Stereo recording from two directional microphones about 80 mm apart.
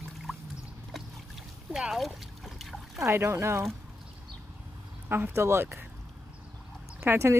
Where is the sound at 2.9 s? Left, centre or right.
Right.